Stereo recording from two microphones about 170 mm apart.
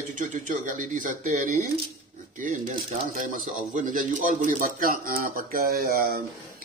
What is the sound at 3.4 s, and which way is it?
Speech, 50° right (ahead or behind).